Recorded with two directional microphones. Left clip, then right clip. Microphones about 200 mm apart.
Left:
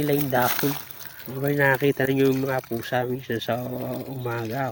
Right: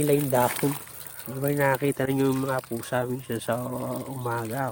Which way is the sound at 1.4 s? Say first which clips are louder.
Left 3 dB; centre (ahead or behind).